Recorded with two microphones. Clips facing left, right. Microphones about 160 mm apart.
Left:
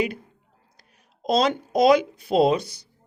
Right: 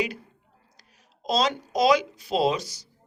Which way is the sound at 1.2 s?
55° left (ahead or behind).